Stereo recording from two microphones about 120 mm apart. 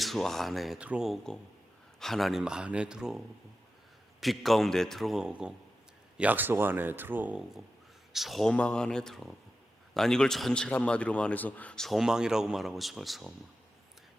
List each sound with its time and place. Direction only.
0.0 s a man's voice: centre (ahead or behind)